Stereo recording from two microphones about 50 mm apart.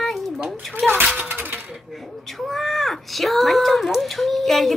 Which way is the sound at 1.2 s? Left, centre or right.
Right.